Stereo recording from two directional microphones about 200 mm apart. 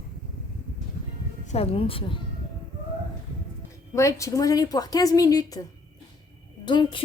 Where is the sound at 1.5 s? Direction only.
30° left (ahead or behind).